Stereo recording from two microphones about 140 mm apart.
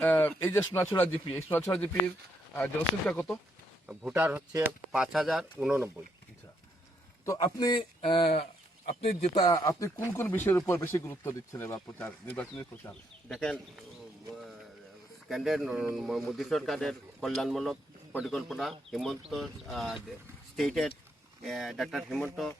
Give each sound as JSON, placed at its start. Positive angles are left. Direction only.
{"t": 0.0, "sound": "speech", "side_deg": 10}
{"t": 3.1, "sound": "speech", "side_deg": 10}
{"t": 4.1, "sound": "a man's voice", "side_deg": -15}
{"t": 7.3, "sound": "speech", "side_deg": 25}
{"t": 9.3, "sound": "speech", "side_deg": 25}
{"t": 15.3, "sound": "a man's voice", "side_deg": 0}